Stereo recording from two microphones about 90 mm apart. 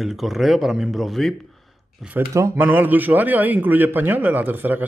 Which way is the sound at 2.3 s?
35° right (ahead or behind).